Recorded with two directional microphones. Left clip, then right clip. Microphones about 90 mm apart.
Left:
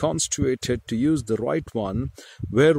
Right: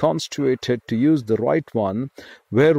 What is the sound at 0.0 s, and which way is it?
Speech, 15° left (ahead or behind).